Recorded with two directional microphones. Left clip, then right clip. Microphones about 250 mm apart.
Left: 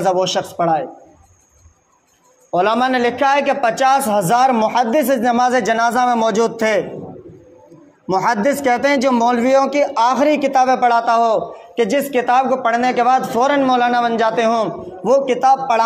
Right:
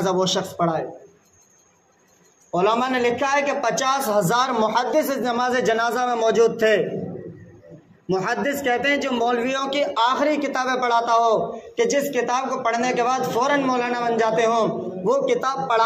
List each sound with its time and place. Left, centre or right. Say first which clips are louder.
0.0 s a man's voice: left 5 dB; left
2.5 s a man's voice: left 5 dB; left
8.1 s a man's voice: left 7 dB; left